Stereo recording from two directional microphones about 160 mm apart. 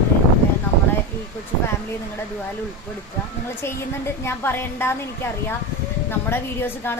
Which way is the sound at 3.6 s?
15° left (ahead or behind).